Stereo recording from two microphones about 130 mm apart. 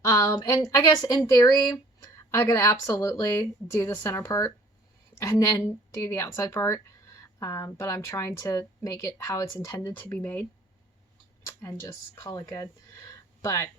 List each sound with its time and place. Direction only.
0.0 s speech: 25° left (ahead or behind)
11.6 s speech: 25° left (ahead or behind)